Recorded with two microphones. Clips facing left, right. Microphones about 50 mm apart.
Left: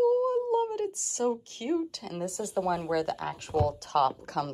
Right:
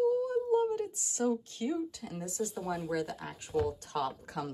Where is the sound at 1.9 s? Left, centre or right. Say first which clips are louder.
Left 6 dB; left.